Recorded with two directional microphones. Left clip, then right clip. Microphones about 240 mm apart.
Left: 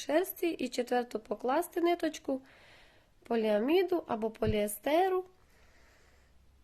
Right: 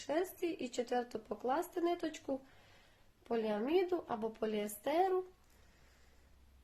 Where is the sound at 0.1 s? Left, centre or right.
Left.